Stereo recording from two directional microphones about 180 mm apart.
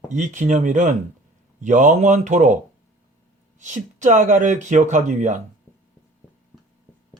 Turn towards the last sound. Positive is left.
turn(degrees=-40)  # may be behind; listen again after turning